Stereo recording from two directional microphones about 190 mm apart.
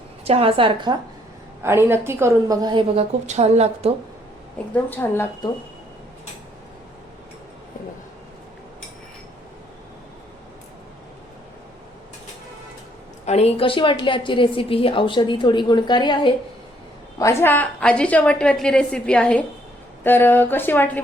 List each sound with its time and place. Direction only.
0.3 s a woman's voice: 30° right (ahead or behind)
1.6 s a woman's voice: 15° right (ahead or behind)
3.2 s speech: 35° right (ahead or behind)
4.7 s speech: 10° left (ahead or behind)
13.2 s a woman's voice: 35° left (ahead or behind); by 21.0 s 10° left (ahead or behind)